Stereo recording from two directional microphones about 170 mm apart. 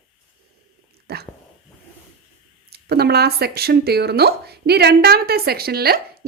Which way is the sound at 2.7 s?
70° right (ahead or behind).